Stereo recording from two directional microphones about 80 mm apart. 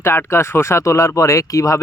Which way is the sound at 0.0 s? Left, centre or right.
Left.